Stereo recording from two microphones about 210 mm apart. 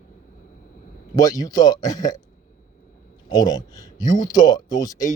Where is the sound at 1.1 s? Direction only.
15° left (ahead or behind).